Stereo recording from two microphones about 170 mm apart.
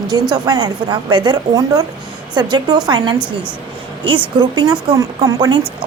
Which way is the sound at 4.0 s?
30° right (ahead or behind).